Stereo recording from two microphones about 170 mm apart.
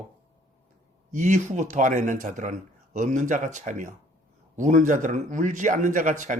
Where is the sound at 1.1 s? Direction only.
45° right (ahead or behind).